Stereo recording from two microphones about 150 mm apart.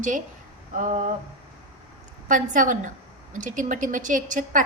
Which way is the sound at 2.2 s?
60° right (ahead or behind).